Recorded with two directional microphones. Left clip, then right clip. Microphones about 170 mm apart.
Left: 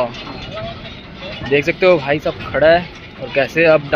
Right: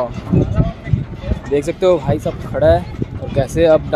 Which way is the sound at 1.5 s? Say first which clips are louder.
Left 2 dB; 10° right (ahead or behind).